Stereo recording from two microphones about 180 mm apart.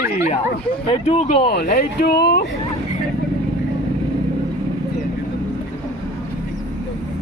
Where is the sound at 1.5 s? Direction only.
55° left (ahead or behind).